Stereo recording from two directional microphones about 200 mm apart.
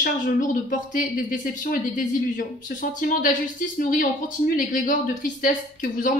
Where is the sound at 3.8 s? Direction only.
45° left (ahead or behind).